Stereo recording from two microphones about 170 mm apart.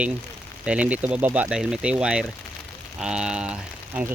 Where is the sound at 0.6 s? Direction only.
5° right (ahead or behind).